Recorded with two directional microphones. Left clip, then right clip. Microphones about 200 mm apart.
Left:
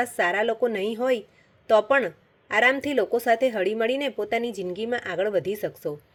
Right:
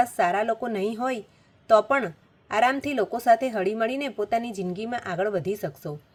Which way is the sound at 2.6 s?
25° left (ahead or behind).